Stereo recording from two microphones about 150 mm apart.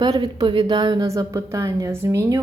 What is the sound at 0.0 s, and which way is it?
A woman's voice, 30° right (ahead or behind).